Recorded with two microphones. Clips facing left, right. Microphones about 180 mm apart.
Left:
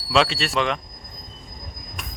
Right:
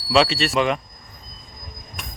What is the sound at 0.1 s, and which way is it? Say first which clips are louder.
Speech: right 2 dB; centre (ahead or behind).